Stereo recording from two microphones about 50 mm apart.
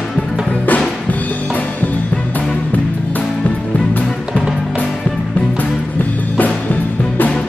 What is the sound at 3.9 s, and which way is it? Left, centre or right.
Music, left.